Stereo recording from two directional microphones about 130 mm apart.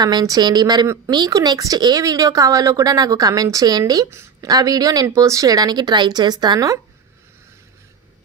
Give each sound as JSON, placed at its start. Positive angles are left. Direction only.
{"t": 0.0, "sound": "speech", "side_deg": -30}